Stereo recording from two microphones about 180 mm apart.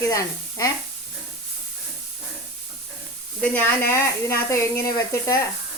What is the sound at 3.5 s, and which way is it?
Speech, 15° left (ahead or behind).